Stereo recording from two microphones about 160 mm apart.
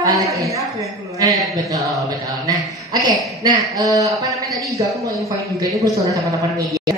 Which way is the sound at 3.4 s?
25° right (ahead or behind).